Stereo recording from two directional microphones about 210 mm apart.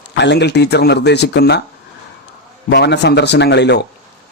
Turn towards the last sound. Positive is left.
turn(degrees=55)  # may be behind; listen again after turning